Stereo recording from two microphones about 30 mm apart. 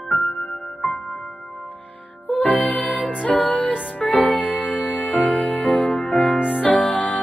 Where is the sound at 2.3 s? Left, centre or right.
Left.